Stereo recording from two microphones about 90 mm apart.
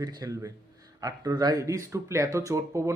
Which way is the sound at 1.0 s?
45° right (ahead or behind).